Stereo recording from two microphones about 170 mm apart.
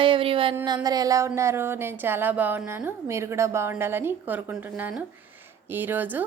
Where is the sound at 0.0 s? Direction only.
30° right (ahead or behind).